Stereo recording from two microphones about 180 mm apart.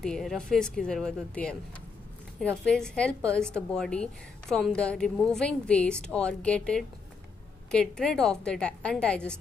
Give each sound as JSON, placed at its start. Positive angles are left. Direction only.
{"t": 0.0, "sound": "a woman's voice", "side_deg": 0}